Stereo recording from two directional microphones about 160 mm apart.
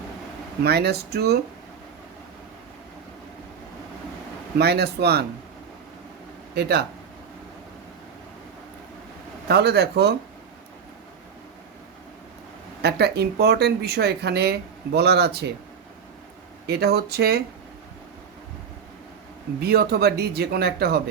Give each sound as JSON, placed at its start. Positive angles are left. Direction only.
{"t": 0.6, "sound": "speech", "side_deg": -90}
{"t": 4.5, "sound": "speech", "side_deg": -85}
{"t": 6.5, "sound": "speech", "side_deg": -90}
{"t": 9.5, "sound": "speech", "side_deg": -90}
{"t": 12.8, "sound": "speech", "side_deg": -90}
{"t": 16.6, "sound": "speech", "side_deg": -90}
{"t": 19.6, "sound": "speech", "side_deg": -75}